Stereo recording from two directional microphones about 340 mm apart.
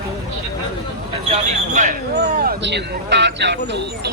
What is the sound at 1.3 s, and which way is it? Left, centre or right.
Speech, right.